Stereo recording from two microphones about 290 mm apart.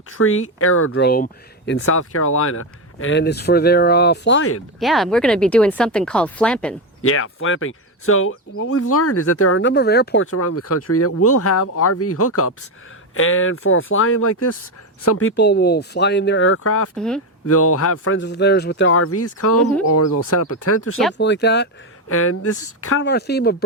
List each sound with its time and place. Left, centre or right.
0.2 s speech: left
1.0 s speech: left
4.8 s speech: centre
7.0 s speech: left
10.2 s speech: left
16.9 s speech: centre
17.4 s speech: left
18.2 s speech: left
21.2 s speech: left
22.1 s speech: left